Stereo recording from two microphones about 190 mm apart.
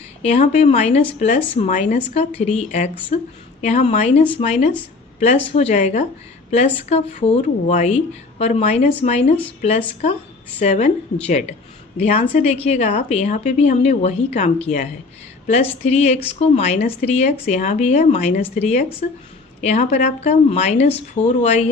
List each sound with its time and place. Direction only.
0.2 s a woman's voice: 35° left (ahead or behind)